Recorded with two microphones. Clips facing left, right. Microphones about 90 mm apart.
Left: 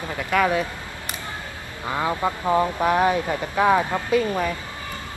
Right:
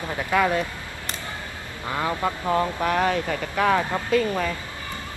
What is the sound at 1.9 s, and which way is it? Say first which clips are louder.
Speech: left 2 dB; 20° left (ahead or behind).